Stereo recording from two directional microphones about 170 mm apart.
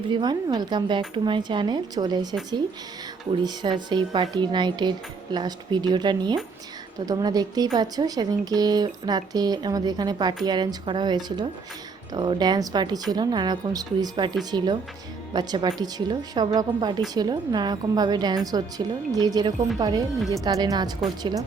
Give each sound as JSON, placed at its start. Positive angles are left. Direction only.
{"t": 0.1, "sound": "speech", "side_deg": -25}
{"t": 3.4, "sound": "speech", "side_deg": -25}